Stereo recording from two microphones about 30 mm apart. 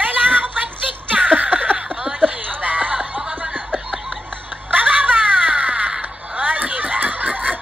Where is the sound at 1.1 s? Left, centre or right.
Right.